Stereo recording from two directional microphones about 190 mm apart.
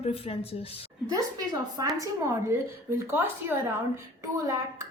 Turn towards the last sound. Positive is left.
turn(degrees=-15)  # may be behind; listen again after turning